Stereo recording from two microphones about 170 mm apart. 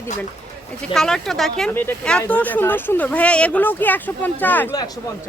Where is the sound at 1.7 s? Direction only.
15° left (ahead or behind).